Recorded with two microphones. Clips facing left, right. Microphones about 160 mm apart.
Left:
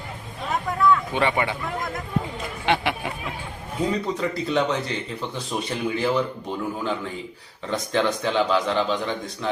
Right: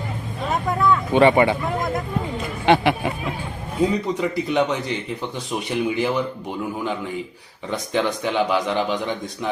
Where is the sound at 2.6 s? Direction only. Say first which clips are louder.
Right 6 dB; 40° right (ahead or behind).